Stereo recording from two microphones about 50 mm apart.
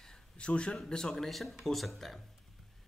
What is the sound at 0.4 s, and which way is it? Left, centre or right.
Speech, left.